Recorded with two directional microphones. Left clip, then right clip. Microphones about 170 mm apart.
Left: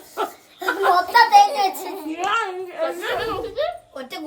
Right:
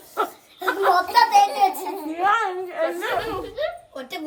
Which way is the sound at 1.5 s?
5° left (ahead or behind).